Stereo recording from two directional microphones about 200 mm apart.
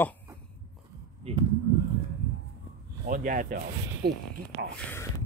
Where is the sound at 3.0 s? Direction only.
45° right (ahead or behind).